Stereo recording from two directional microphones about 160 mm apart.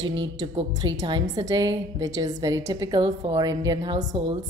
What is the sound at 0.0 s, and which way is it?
A woman's voice, 25° right (ahead or behind).